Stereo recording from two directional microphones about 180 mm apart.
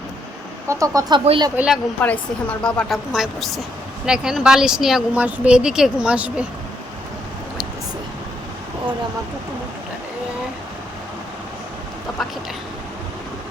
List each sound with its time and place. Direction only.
0.7 s speech: 20° right (ahead or behind)
1.2 s speech: 30° right (ahead or behind)
1.5 s speech: 5° right (ahead or behind)
2.0 s speech: 10° left (ahead or behind)